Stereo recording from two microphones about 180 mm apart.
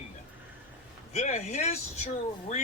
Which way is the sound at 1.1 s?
40° left (ahead or behind).